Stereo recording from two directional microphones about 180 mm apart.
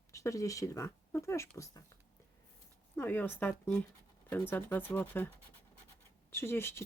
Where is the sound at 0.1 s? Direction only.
15° left (ahead or behind).